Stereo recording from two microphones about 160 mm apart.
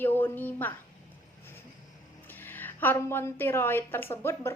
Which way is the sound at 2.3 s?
10° left (ahead or behind).